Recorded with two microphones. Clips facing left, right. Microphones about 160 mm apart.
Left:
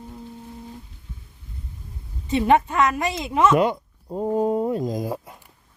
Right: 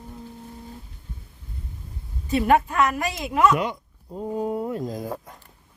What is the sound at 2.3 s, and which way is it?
Speech, 25° left (ahead or behind).